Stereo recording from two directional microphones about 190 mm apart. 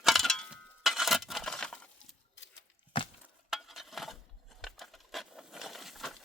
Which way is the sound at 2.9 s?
25° left (ahead or behind).